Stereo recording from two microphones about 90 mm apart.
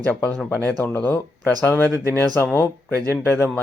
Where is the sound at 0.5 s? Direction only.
15° left (ahead or behind).